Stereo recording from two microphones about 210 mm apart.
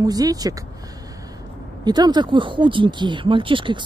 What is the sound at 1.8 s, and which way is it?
Speech, 20° right (ahead or behind).